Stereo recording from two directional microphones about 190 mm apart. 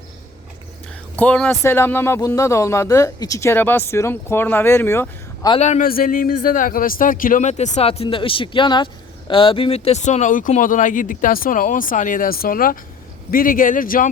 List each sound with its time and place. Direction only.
1.1 s speech: 10° left (ahead or behind)
5.5 s speech: 35° left (ahead or behind)
5.9 s speech: 50° left (ahead or behind)